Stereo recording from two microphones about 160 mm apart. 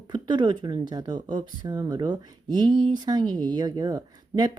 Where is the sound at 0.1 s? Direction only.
25° right (ahead or behind).